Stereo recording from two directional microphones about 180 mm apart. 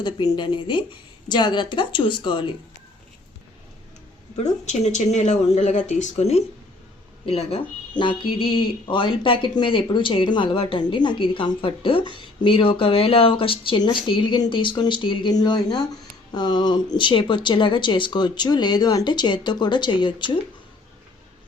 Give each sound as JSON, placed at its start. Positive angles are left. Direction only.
{"t": 0.0, "sound": "speech", "side_deg": 25}
{"t": 4.6, "sound": "speech", "side_deg": 40}